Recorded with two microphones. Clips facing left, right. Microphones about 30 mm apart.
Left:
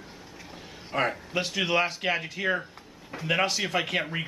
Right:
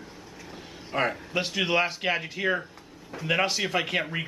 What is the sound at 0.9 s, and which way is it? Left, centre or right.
A man's voice, centre.